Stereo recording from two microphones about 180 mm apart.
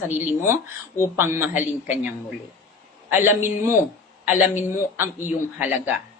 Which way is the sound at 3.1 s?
10° right (ahead or behind).